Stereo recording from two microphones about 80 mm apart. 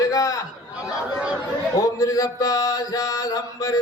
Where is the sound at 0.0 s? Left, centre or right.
Left.